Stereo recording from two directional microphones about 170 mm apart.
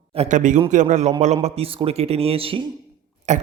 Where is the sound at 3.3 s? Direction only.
45° right (ahead or behind).